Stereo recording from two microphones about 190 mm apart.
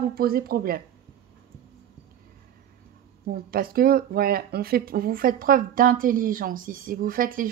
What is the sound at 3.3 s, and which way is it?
A woman's voice, 50° right (ahead or behind).